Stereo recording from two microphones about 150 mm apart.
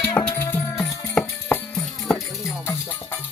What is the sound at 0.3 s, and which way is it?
Music, 15° left (ahead or behind).